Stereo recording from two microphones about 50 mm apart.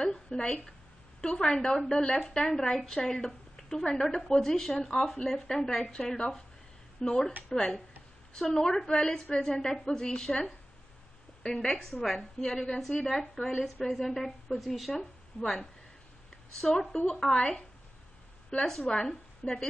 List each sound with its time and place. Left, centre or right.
0.0 s a woman's voice: centre
7.5 s a woman's voice: centre
11.4 s a woman's voice: centre
16.9 s a woman's voice: centre